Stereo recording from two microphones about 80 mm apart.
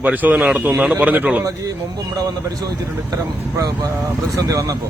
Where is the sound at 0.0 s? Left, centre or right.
Right.